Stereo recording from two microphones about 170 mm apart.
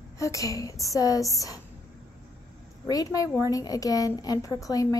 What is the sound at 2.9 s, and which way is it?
Speech, 20° left (ahead or behind).